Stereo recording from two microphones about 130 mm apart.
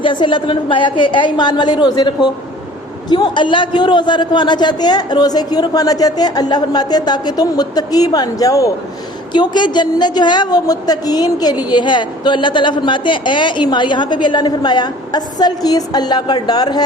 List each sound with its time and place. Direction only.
0.0 s a woman's voice: 40° left (ahead or behind)